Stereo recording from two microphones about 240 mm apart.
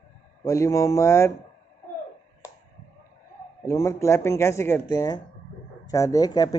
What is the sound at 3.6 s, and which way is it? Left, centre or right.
Speech, centre.